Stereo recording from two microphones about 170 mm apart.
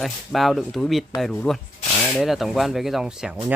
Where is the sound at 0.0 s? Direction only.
Centre (ahead or behind).